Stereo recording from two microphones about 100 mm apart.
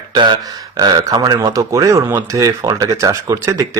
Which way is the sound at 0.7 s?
40° right (ahead or behind).